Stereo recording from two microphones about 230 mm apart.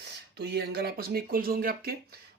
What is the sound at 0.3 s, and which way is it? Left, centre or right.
Speech, right.